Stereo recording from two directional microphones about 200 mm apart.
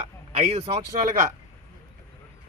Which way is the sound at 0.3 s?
30° right (ahead or behind).